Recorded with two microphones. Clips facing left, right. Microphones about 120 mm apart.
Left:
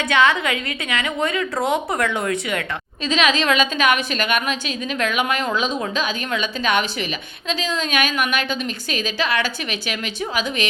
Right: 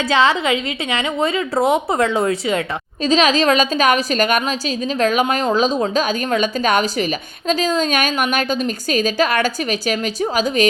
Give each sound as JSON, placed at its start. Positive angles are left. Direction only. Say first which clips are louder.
{"t": 0.1, "sound": "a woman's voice", "louder": "right 2 dB", "side_deg": -30}